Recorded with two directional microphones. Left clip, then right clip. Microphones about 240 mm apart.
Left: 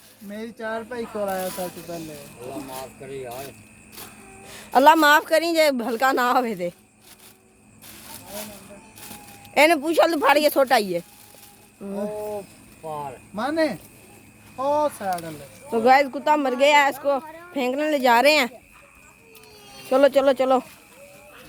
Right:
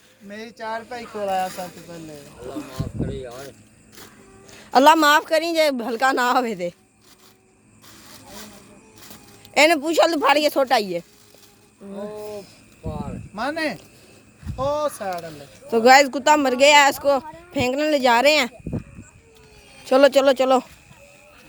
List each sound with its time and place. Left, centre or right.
0.3 s speech: right
4.7 s speech: centre
9.6 s speech: centre
13.3 s speech: right; by 18.5 s centre
19.9 s speech: centre